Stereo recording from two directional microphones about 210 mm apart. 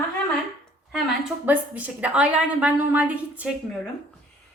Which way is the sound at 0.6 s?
Centre (ahead or behind).